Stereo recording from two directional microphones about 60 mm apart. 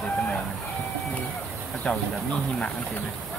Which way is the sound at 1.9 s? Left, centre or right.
Centre.